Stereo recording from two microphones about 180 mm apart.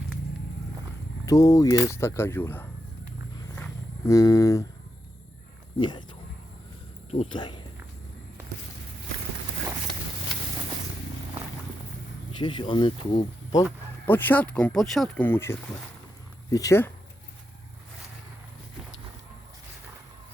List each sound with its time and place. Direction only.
1.2 s speech: 20° left (ahead or behind)
3.5 s cattle: 15° left (ahead or behind)
7.1 s speech: 30° left (ahead or behind)
12.4 s speech: 30° left (ahead or behind)
14.0 s speech: 10° left (ahead or behind)